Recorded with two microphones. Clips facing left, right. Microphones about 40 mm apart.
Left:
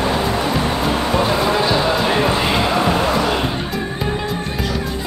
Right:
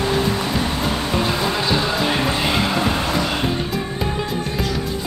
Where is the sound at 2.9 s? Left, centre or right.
Left.